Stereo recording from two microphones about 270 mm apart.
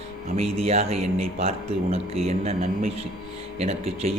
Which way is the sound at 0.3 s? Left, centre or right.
Right.